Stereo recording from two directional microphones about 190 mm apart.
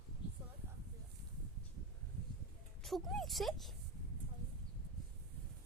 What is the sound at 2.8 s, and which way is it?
Speech, centre (ahead or behind).